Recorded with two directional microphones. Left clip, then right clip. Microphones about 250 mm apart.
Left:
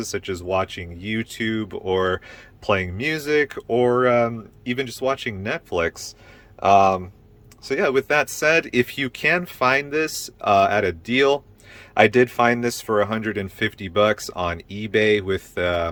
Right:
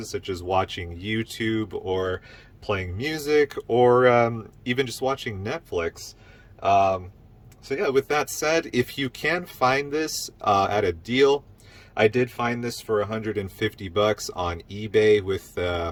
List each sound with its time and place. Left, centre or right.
0.0 s speech: centre